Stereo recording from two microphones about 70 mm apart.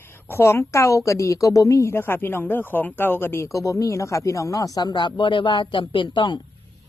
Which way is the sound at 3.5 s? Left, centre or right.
Left.